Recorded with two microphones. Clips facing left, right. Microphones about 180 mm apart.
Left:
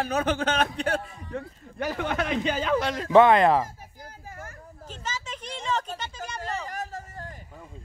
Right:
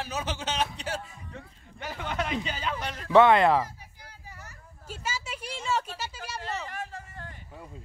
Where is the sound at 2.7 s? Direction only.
90° left.